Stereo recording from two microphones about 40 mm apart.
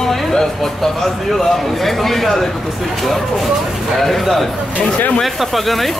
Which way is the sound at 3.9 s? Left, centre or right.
Centre.